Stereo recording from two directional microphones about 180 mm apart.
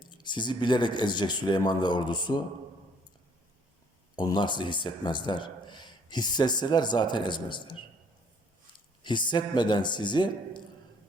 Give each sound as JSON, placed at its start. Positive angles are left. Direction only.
{"t": 0.0, "sound": "speech", "side_deg": 25}
{"t": 4.1, "sound": "speech", "side_deg": 25}
{"t": 9.0, "sound": "speech", "side_deg": 25}